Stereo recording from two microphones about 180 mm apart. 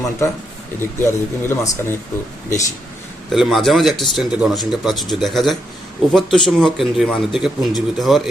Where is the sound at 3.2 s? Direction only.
Centre (ahead or behind).